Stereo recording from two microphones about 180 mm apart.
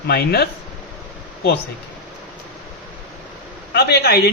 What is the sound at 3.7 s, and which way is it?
Speech, 65° left (ahead or behind).